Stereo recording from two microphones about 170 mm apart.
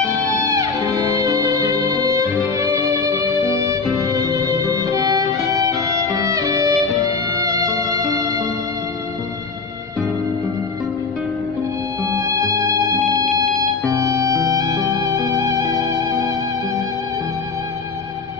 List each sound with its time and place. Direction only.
0.0 s music: 20° right (ahead or behind)
12.0 s music: 15° right (ahead or behind)
13.8 s music: 20° right (ahead or behind)